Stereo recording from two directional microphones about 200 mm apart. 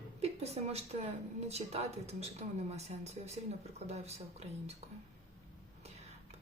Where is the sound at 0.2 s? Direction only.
30° right (ahead or behind).